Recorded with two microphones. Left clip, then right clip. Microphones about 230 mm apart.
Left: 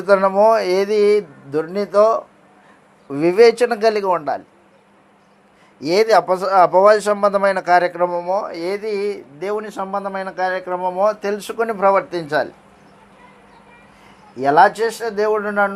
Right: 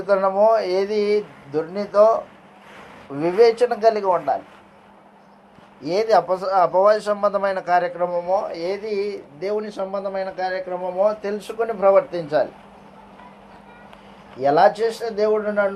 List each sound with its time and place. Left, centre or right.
0.1 s speech: left
5.8 s speech: left
14.3 s speech: left